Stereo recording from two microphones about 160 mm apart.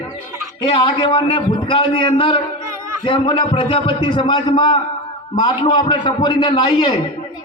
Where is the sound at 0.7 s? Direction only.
25° left (ahead or behind).